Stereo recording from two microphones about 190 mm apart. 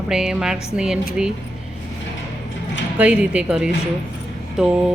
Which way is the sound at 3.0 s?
5° right (ahead or behind).